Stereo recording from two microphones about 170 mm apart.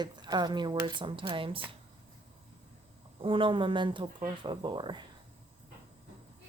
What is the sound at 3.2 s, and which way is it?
A woman's voice, 30° right (ahead or behind).